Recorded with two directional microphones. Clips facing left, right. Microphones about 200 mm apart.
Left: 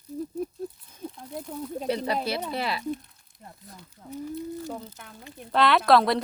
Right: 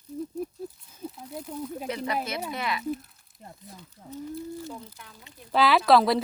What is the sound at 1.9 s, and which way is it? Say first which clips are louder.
Speech: left 4 dB; 30° left (ahead or behind).